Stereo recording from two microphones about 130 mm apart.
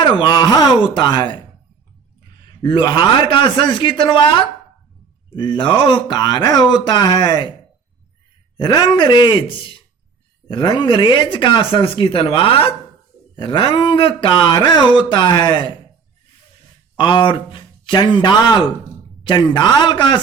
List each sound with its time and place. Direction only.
0.0 s speech: 35° left (ahead or behind)
2.6 s speech: 40° left (ahead or behind)
8.5 s speech: 35° left (ahead or behind)
17.0 s speech: 40° left (ahead or behind)